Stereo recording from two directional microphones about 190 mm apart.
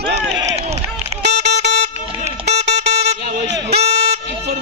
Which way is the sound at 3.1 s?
35° right (ahead or behind).